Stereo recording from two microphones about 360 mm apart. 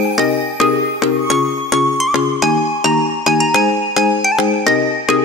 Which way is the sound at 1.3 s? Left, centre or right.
Centre.